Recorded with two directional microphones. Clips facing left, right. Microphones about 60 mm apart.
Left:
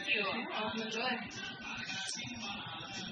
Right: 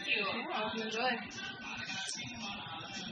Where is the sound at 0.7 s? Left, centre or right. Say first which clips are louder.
Right 3 dB; right.